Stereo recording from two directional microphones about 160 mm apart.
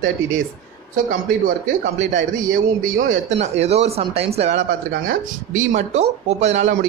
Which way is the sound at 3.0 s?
55° right (ahead or behind).